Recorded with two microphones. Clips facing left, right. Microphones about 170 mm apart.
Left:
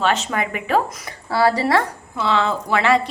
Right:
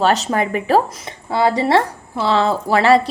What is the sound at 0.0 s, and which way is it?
Speech, 35° right (ahead or behind).